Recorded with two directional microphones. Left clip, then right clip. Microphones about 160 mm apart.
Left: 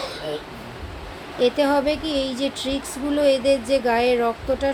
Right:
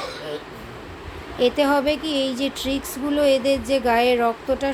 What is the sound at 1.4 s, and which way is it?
Speech, 15° right (ahead or behind).